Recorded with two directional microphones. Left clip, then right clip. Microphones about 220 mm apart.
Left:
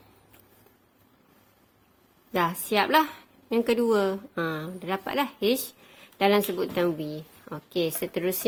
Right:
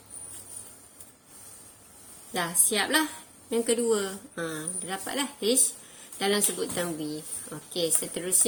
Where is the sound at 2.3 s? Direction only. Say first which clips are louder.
Left 4 dB; 40° left (ahead or behind).